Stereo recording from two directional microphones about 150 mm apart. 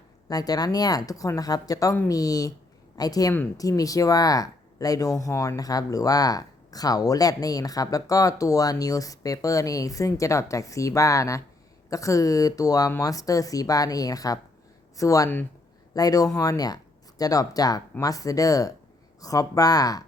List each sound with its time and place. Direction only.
0.3 s speech: 25° left (ahead or behind)